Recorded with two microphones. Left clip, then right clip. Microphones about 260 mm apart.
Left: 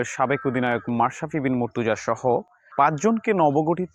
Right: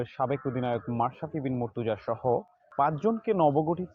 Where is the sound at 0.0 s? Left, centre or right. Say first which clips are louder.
Left 7 dB; left.